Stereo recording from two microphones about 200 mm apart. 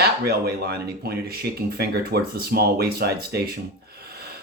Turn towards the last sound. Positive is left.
turn(degrees=-50)  # may be behind; listen again after turning